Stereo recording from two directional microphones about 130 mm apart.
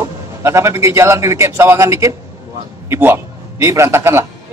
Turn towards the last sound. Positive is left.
turn(degrees=-20)  # may be behind; listen again after turning